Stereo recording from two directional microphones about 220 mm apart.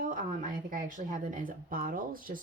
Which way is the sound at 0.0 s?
35° right (ahead or behind).